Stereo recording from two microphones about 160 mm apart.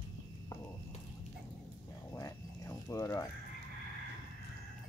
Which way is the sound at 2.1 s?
20° left (ahead or behind).